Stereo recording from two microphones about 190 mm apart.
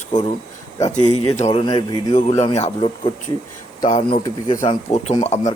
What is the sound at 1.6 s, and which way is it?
Speech, 20° left (ahead or behind).